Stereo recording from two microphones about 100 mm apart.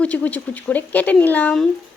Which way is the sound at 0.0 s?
15° left (ahead or behind).